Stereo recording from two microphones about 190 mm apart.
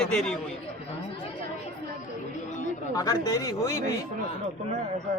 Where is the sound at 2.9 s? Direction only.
20° left (ahead or behind).